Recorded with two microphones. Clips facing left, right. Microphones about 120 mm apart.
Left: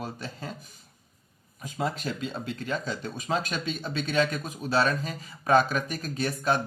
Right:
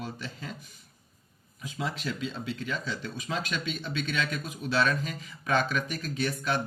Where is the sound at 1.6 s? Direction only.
45° left (ahead or behind).